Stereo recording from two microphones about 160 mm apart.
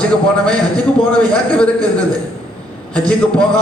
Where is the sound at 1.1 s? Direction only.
5° left (ahead or behind).